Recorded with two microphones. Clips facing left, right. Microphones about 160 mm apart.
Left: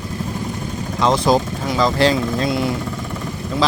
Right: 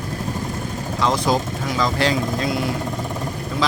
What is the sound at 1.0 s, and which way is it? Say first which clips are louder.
Speech: left 4 dB; 25° left (ahead or behind).